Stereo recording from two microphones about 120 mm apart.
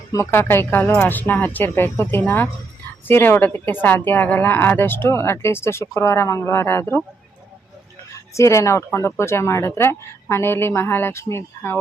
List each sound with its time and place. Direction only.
0.1 s a woman's voice: 20° left (ahead or behind)
8.4 s a woman's voice: 25° left (ahead or behind)